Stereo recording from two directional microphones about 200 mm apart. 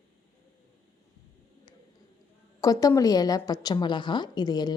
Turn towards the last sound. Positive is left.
turn(degrees=20)  # may be behind; listen again after turning